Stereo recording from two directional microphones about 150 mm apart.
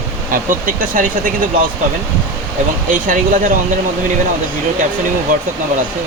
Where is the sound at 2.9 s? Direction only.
65° right (ahead or behind).